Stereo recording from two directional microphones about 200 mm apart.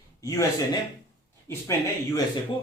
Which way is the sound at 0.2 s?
15° left (ahead or behind).